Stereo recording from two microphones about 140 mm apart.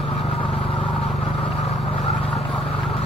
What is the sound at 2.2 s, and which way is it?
Vehicle, 5° left (ahead or behind).